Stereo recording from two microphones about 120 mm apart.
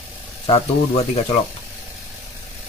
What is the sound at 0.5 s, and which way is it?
Speech, 55° left (ahead or behind).